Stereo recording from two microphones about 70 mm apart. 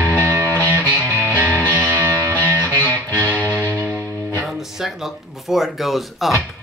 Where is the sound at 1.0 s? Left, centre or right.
Right.